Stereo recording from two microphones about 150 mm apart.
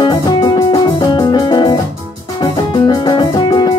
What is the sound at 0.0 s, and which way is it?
Music, 30° left (ahead or behind).